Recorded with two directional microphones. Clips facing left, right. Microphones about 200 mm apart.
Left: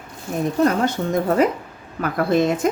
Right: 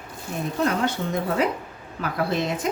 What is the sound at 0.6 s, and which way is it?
Speech, 45° left (ahead or behind).